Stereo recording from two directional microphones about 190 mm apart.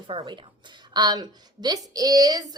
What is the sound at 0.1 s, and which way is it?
A woman's voice, 25° right (ahead or behind).